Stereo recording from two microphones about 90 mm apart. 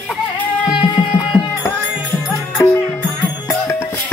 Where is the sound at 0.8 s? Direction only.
65° left (ahead or behind).